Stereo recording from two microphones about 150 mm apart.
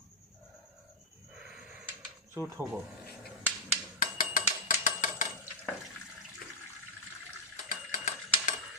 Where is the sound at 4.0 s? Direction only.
65° left (ahead or behind).